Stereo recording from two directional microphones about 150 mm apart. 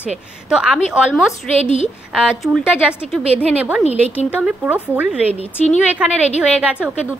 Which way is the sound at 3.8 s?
45° left (ahead or behind).